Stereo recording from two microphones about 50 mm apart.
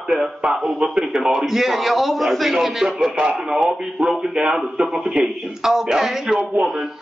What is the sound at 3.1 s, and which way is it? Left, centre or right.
Speech, centre.